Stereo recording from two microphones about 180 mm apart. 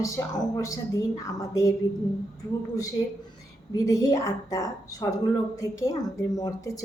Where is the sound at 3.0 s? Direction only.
25° left (ahead or behind).